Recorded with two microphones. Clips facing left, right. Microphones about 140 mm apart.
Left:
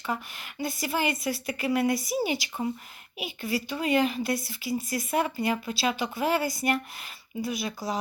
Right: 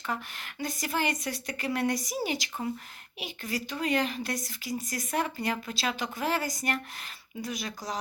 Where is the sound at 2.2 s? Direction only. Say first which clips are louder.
Left 3 dB; 40° right (ahead or behind).